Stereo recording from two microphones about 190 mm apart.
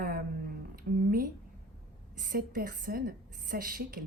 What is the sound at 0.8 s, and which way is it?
A woman's voice, 50° right (ahead or behind).